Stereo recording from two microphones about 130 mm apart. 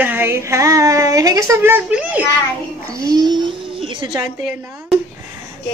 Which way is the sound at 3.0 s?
35° right (ahead or behind).